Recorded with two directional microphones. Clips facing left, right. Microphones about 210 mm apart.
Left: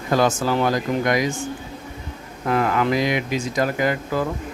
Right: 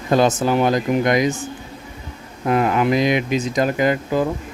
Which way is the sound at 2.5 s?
20° right (ahead or behind).